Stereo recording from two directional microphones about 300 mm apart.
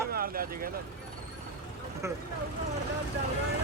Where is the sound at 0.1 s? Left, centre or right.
Right.